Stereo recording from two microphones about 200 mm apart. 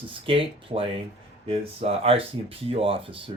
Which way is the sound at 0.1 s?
25° right (ahead or behind).